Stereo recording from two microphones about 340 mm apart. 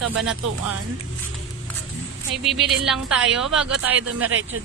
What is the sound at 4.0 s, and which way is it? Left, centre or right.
Speech, right.